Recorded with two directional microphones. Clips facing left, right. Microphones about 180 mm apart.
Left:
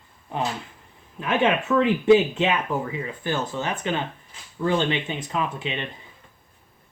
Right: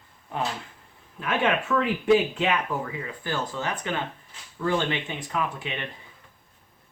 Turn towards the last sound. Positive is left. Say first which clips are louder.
# left 2 dB
turn(degrees=25)  # may be behind; listen again after turning